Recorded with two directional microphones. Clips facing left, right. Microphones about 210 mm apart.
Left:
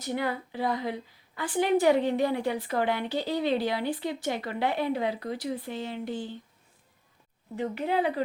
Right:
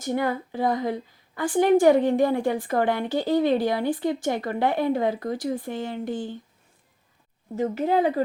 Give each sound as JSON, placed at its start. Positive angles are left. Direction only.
{"t": 0.0, "sound": "a woman's voice", "side_deg": -45}
{"t": 7.5, "sound": "speech", "side_deg": -40}